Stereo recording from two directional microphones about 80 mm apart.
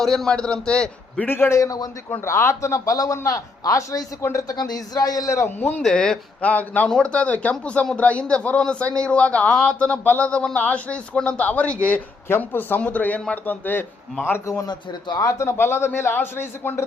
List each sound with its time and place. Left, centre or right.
0.0 s a man's voice: centre
1.3 s a man's voice: left
4.5 s a man's voice: left
5.5 s a man's voice: left
5.8 s a man's voice: centre; by 14.4 s left
14.4 s a man's voice: left
14.7 s a man's voice: left
15.2 s a man's voice: left